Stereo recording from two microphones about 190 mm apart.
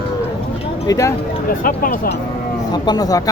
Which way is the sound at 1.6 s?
50° left (ahead or behind).